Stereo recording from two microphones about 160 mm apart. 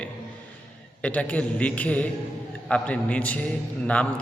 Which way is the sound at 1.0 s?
10° left (ahead or behind).